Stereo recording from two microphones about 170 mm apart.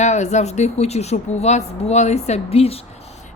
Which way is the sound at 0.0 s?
40° left (ahead or behind).